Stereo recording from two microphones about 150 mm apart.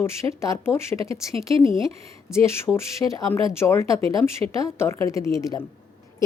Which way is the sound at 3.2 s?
15° left (ahead or behind).